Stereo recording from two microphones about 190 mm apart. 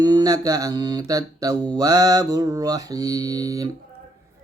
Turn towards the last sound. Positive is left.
turn(degrees=-20)  # may be behind; listen again after turning